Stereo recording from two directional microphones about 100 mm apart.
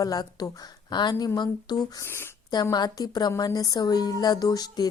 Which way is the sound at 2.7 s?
45° left (ahead or behind).